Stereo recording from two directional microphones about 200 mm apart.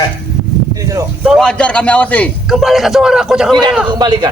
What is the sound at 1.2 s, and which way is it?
A man's voice, centre (ahead or behind).